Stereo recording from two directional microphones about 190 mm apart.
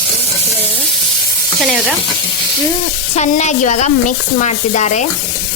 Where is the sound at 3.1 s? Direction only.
35° left (ahead or behind).